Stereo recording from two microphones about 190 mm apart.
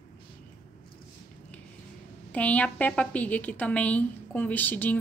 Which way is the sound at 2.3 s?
5° left (ahead or behind).